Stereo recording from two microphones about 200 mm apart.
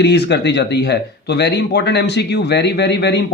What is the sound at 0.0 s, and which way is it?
A man's voice, 55° left (ahead or behind).